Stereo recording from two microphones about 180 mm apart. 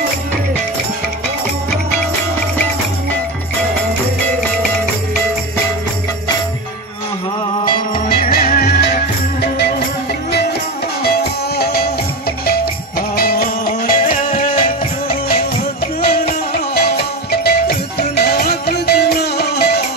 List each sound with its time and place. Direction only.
7.9 s music: 55° left (ahead or behind)
11.0 s music: 60° left (ahead or behind)
13.1 s music: 55° left (ahead or behind)